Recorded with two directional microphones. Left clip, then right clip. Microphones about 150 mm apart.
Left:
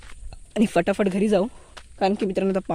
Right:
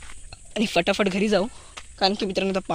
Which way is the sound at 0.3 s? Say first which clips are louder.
Left 2 dB; 50° left (ahead or behind).